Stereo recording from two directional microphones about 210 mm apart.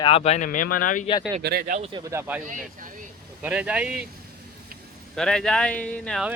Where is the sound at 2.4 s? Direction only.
40° right (ahead or behind).